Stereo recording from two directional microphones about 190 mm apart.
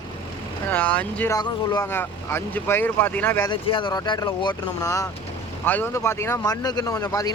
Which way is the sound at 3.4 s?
25° left (ahead or behind).